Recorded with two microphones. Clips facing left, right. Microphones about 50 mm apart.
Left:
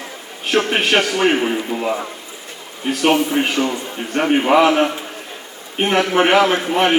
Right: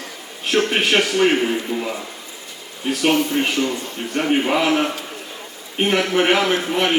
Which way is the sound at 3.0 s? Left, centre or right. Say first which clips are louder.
Left 2 dB; left.